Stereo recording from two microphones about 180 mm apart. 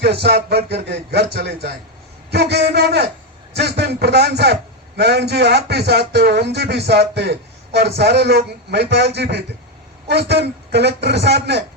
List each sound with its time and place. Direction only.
0.0 s a man's voice: 65° right (ahead or behind)